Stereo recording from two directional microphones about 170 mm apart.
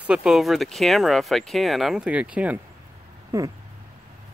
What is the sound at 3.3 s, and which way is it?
Speech, 20° right (ahead or behind).